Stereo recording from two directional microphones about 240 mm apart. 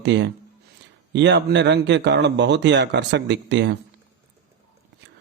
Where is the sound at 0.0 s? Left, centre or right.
Right.